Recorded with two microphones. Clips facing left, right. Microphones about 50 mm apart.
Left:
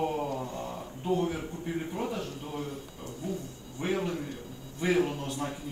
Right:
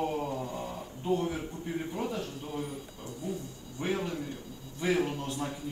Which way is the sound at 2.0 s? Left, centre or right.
Left.